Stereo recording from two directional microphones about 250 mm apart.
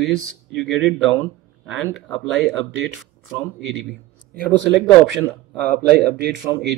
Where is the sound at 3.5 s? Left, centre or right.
Centre.